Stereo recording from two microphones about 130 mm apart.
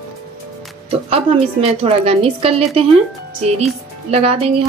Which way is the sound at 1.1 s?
50° right (ahead or behind).